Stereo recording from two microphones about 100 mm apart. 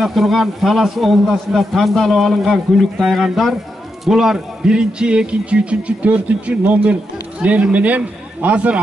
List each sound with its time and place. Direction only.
0.0 s a man's voice: centre (ahead or behind)